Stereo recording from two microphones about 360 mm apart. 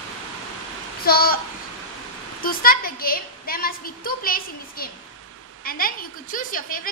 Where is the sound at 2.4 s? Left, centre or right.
Left.